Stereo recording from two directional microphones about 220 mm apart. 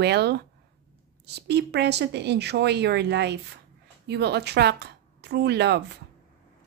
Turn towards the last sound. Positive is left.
turn(degrees=-50)  # may be behind; listen again after turning